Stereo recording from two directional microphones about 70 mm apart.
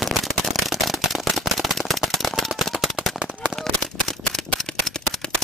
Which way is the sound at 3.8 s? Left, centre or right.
Centre.